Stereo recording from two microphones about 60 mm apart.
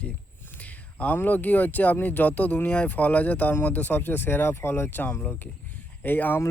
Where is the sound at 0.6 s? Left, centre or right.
Left.